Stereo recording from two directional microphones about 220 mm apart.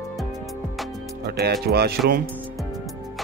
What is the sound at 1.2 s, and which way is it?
Music, 45° right (ahead or behind).